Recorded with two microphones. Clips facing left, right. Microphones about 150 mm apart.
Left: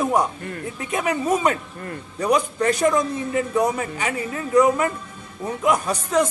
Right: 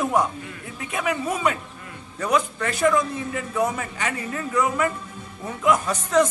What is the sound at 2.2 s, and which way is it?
Speech, 15° left (ahead or behind).